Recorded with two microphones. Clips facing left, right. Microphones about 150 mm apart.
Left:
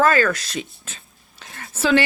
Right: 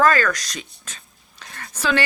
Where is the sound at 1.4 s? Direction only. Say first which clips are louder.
Even; 25° left (ahead or behind).